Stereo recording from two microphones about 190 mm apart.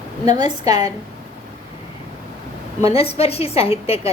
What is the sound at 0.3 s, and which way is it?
Speech, 20° right (ahead or behind).